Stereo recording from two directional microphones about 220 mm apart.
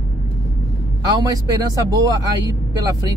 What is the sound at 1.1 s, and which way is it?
Speech, 15° right (ahead or behind).